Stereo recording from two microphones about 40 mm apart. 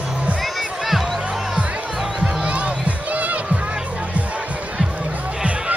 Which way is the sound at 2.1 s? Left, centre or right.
Right.